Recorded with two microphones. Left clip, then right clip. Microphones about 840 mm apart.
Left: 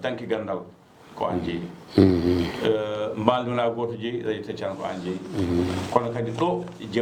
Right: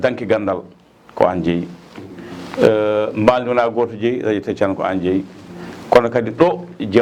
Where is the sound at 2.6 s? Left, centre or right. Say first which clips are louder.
Right 12 dB; right.